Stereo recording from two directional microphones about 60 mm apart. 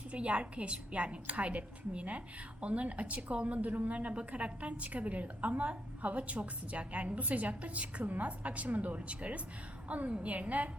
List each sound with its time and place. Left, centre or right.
0.1 s a woman's voice: right